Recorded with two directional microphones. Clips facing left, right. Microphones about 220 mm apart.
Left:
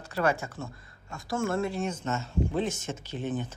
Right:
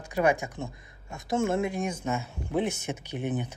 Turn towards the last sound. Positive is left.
turn(degrees=-15)  # may be behind; listen again after turning